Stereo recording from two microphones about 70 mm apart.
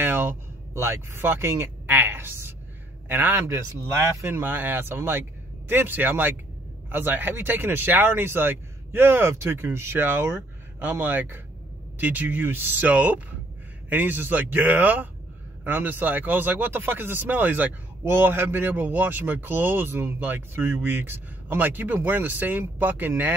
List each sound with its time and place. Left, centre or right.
0.0 s speech: right
3.4 s speech: right